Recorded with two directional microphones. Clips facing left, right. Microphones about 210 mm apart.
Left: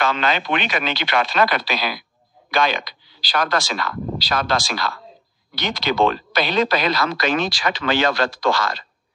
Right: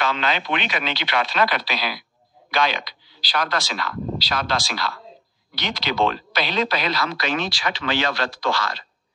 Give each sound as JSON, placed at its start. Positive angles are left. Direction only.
{"t": 0.0, "sound": "speech", "side_deg": 50}